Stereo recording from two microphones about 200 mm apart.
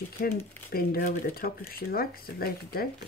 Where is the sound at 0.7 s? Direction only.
45° left (ahead or behind).